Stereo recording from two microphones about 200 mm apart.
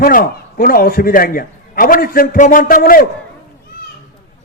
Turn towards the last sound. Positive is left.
turn(degrees=45)  # may be behind; listen again after turning